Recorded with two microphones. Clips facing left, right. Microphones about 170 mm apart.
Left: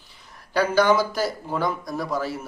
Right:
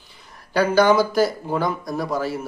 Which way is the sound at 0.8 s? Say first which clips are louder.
Right 4 dB; centre (ahead or behind).